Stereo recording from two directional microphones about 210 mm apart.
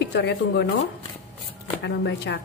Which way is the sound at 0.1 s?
55° left (ahead or behind).